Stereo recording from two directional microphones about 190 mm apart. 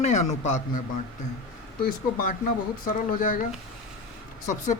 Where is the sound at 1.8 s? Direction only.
50° left (ahead or behind).